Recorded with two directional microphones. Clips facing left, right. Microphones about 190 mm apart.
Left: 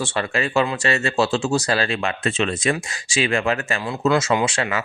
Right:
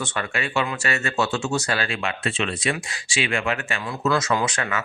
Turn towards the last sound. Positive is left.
turn(degrees=25)  # may be behind; listen again after turning